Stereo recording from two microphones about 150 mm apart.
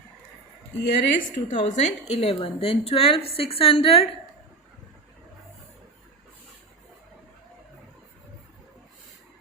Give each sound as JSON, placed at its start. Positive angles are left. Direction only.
{"t": 0.8, "sound": "a woman's voice", "side_deg": 65}
{"t": 1.7, "sound": "a woman's voice", "side_deg": 45}